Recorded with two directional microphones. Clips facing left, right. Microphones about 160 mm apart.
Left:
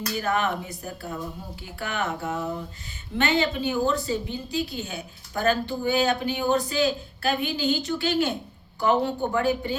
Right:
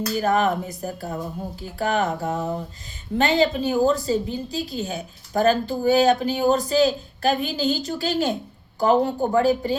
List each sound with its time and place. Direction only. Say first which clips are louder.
0.1 s a woman's voice: right 5 dB; 40° right (ahead or behind)